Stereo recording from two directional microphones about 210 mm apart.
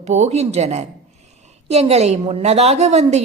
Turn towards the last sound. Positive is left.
turn(degrees=-30)  # may be behind; listen again after turning